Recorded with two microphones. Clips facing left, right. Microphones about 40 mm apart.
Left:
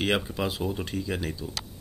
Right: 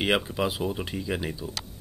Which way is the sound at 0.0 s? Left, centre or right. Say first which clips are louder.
Right 2 dB; centre.